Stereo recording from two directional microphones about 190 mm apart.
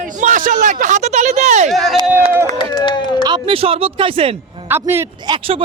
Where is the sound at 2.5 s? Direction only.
25° left (ahead or behind).